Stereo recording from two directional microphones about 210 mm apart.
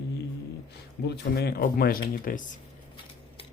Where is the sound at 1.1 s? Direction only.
50° left (ahead or behind).